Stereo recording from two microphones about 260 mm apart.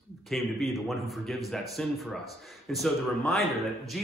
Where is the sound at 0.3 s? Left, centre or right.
Centre.